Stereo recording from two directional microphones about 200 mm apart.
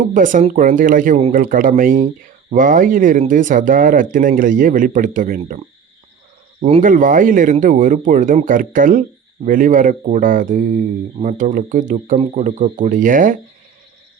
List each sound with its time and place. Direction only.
0.0 s speech: 40° right (ahead or behind)
6.7 s speech: 35° right (ahead or behind)